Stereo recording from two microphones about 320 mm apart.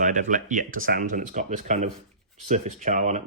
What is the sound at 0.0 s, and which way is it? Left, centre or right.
Speech, right.